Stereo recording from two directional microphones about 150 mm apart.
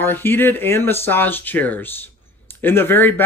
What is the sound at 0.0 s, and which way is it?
Speech, 15° left (ahead or behind).